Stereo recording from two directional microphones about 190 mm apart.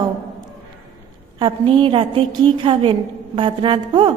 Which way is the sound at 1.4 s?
25° right (ahead or behind).